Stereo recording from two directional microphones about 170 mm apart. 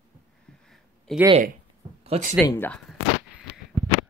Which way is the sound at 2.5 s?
10° left (ahead or behind).